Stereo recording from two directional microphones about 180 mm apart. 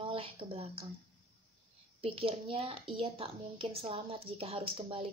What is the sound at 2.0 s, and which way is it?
Speech, 30° right (ahead or behind).